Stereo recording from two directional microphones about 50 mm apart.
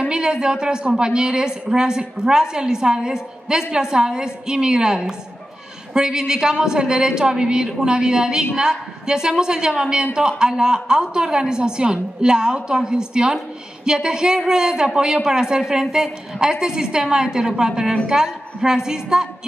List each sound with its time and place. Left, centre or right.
0.1 s a woman's voice: centre